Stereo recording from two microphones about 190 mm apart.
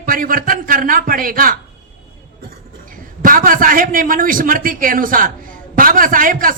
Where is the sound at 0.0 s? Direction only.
45° right (ahead or behind).